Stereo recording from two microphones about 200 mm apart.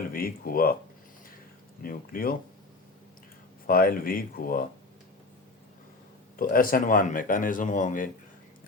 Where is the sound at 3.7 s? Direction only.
45° left (ahead or behind).